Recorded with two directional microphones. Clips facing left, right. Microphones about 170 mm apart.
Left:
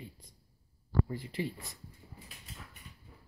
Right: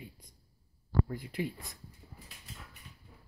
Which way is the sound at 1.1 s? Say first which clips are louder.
Even; 50° right (ahead or behind).